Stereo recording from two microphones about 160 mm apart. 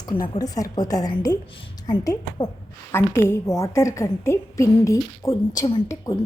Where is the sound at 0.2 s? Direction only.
25° left (ahead or behind).